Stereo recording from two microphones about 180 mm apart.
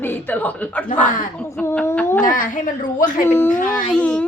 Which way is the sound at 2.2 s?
50° left (ahead or behind).